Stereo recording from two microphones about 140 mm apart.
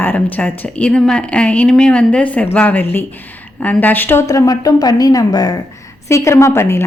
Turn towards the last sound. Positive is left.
turn(degrees=20)  # may be behind; listen again after turning